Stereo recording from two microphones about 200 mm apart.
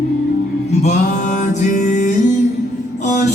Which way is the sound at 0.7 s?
35° left (ahead or behind).